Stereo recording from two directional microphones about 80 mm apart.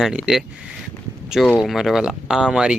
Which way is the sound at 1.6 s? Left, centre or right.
Centre.